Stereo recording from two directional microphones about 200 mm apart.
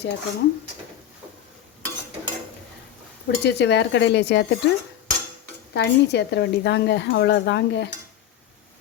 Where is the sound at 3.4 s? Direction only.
60° left (ahead or behind).